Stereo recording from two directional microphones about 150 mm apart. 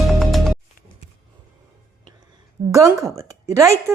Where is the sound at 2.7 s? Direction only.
20° right (ahead or behind).